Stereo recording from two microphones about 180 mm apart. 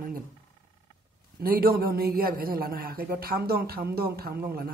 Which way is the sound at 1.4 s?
55° right (ahead or behind).